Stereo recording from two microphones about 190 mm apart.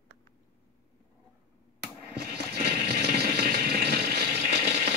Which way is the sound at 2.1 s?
55° right (ahead or behind).